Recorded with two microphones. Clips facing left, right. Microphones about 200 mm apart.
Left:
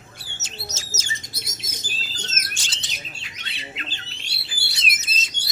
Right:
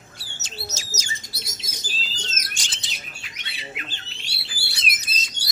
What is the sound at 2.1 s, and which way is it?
Bird, 55° left (ahead or behind).